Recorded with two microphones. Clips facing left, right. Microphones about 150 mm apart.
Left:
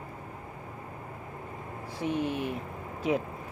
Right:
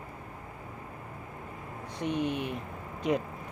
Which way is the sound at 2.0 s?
Centre (ahead or behind).